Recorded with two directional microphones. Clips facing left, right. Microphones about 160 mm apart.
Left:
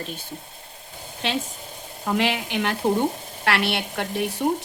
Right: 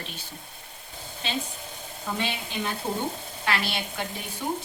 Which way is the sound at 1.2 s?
85° left.